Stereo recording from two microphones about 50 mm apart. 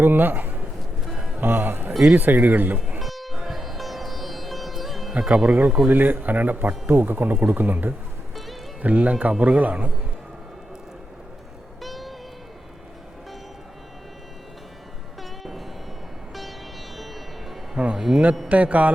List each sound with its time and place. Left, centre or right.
0.0 s a man's voice: right
1.0 s music: centre
1.4 s a man's voice: right
1.9 s a man's voice: centre
2.1 s speech: right
3.0 s sitar: centre
5.3 s speech: centre
5.9 s speech: right
11.8 s music: centre
15.2 s music: centre
17.7 s music: centre
18.4 s speech: right